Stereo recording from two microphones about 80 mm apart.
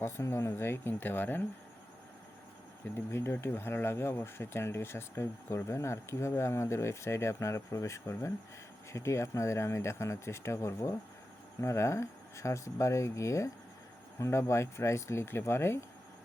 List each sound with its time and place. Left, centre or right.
0.0 s speech: left
2.9 s speech: left